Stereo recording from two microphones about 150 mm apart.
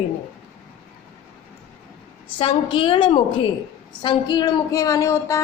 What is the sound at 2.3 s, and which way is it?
A woman's voice, 35° left (ahead or behind).